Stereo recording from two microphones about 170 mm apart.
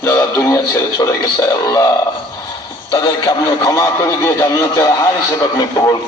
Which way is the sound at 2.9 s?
25° left (ahead or behind).